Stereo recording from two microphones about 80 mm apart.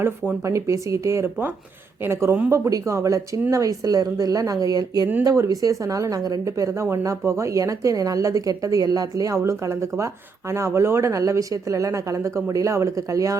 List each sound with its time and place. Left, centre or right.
0.4 s speech: right
2.5 s speech: right